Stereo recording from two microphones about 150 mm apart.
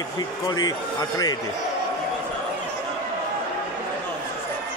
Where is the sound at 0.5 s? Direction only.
25° left (ahead or behind).